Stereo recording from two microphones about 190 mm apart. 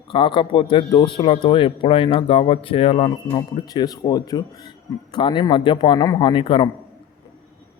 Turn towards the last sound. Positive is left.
turn(degrees=25)  # may be behind; listen again after turning